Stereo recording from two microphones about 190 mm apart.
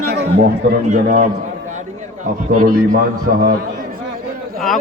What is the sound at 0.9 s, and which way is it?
Speech, 40° right (ahead or behind).